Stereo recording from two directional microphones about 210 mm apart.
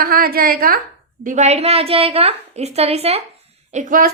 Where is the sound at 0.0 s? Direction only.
45° right (ahead or behind).